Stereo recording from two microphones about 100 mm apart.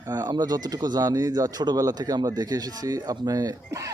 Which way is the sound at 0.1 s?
40° right (ahead or behind).